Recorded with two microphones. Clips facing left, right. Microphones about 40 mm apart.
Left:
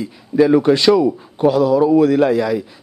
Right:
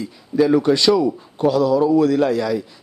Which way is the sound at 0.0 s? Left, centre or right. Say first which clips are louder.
Left 3 dB; centre.